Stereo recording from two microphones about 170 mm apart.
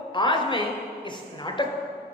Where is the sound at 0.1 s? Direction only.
30° left (ahead or behind).